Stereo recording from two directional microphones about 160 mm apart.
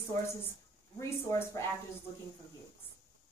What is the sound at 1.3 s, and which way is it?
Speech, 15° left (ahead or behind).